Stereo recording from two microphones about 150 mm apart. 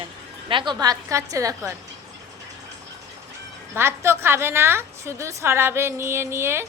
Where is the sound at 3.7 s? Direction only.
15° right (ahead or behind).